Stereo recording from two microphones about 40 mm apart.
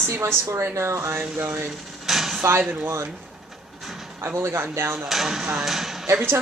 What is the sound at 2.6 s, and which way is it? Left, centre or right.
Speech, right.